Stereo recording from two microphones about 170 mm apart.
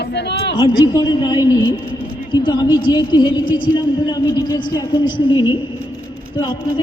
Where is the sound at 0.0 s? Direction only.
85° left.